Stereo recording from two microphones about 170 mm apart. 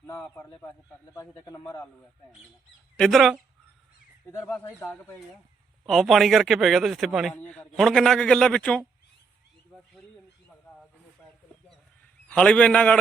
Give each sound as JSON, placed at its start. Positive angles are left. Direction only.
{"t": 0.0, "sound": "a man's voice", "side_deg": 15}
{"t": 3.0, "sound": "speech", "side_deg": 0}
{"t": 4.3, "sound": "a man's voice", "side_deg": 10}
{"t": 5.8, "sound": "speech", "side_deg": 0}
{"t": 12.3, "sound": "a man's voice", "side_deg": 5}